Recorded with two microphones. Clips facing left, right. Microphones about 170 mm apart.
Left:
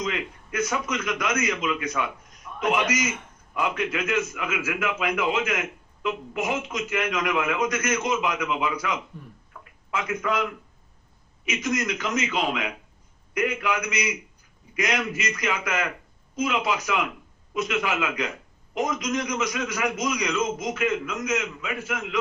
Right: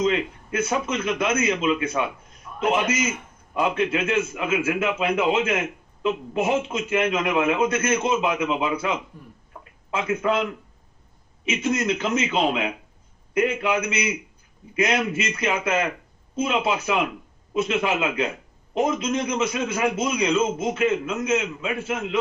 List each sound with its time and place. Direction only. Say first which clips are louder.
0.0 s a man's voice: right 7 dB; 25° right (ahead or behind)
9.5 s a sound: right 2 dB; 25° right (ahead or behind)
11.4 s a man's voice: right 4 dB; 25° right (ahead or behind)